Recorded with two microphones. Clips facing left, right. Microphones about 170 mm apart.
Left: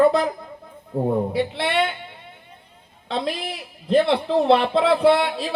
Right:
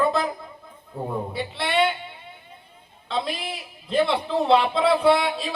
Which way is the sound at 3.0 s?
60° left (ahead or behind).